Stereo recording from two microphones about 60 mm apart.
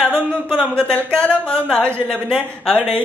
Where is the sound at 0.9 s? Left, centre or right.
Left.